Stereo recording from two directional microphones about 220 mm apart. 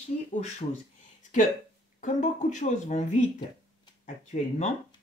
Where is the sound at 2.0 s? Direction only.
35° left (ahead or behind).